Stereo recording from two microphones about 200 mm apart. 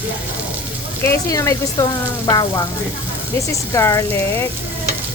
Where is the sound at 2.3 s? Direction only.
20° left (ahead or behind).